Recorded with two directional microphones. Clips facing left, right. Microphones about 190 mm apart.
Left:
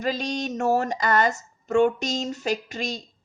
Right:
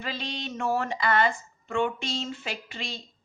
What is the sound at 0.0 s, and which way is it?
A woman's voice, 45° left (ahead or behind).